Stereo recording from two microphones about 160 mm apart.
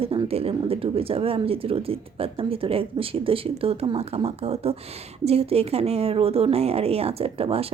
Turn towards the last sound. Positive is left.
turn(degrees=-40)  # may be behind; listen again after turning